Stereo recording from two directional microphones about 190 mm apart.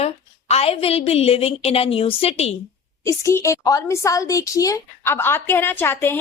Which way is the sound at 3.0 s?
15° left (ahead or behind).